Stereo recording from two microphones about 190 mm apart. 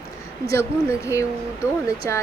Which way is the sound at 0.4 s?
15° left (ahead or behind).